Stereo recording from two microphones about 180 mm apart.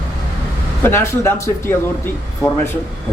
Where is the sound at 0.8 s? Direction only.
15° left (ahead or behind).